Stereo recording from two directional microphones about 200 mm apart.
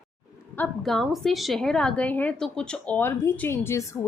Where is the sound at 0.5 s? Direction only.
5° left (ahead or behind).